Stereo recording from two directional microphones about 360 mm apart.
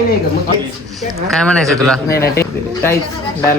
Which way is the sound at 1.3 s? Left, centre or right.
Centre.